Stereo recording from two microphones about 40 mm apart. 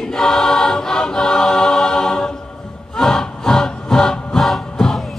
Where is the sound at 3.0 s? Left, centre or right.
Centre.